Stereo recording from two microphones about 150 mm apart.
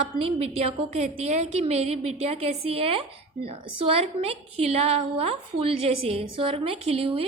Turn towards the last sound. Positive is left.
turn(degrees=-40)  # may be behind; listen again after turning